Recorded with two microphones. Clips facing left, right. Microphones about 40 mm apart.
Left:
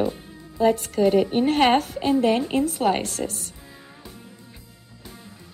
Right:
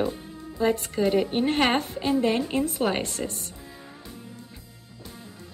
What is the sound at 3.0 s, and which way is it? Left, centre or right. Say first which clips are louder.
Speech: left 3 dB; centre.